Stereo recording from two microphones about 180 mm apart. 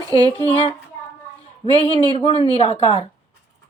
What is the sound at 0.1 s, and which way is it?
Speech, 20° right (ahead or behind).